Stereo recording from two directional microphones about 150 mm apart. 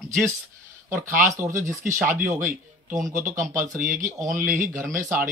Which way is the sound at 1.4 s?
20° right (ahead or behind).